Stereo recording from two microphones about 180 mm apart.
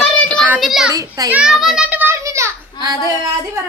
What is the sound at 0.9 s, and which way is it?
Speech, 20° right (ahead or behind).